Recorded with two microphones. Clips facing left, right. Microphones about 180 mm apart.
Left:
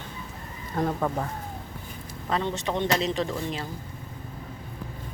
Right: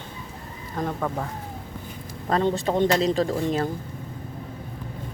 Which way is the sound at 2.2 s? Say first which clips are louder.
Right 5 dB; 40° right (ahead or behind).